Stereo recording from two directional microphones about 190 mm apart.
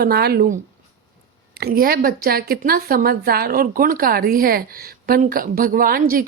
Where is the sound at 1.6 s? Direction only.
50° right (ahead or behind).